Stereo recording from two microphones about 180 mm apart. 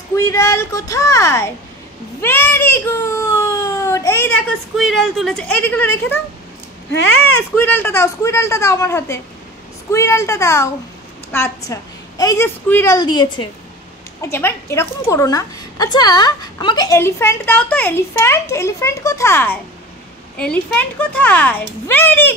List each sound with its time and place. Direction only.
0.1 s a woman's voice: 15° left (ahead or behind)
2.2 s baby cry: 10° left (ahead or behind)
4.7 s speech: centre (ahead or behind)
7.5 s a woman's voice: 10° left (ahead or behind)